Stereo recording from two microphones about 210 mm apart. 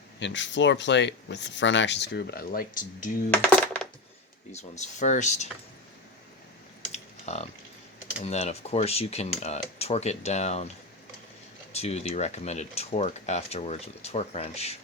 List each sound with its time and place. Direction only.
0.2 s speech: 60° left (ahead or behind)
3.3 s coin: 5° left (ahead or behind)
4.5 s speech: 35° left (ahead or behind)
6.9 s typing: 30° left (ahead or behind)
8.2 s speech: 30° left (ahead or behind)
11.7 s speech: 30° left (ahead or behind)